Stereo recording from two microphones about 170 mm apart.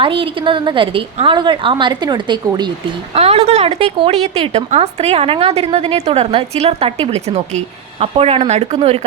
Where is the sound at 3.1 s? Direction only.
35° right (ahead or behind).